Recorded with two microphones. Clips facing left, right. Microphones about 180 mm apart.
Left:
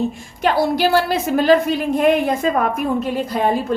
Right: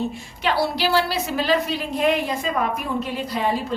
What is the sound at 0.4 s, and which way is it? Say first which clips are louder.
A woman's voice: left 5 dB; 50° left (ahead or behind).